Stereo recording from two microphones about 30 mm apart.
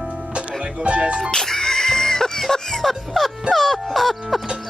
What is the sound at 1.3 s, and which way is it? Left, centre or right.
Music, centre.